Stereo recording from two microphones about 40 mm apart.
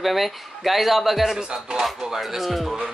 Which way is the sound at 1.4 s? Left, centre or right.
Centre.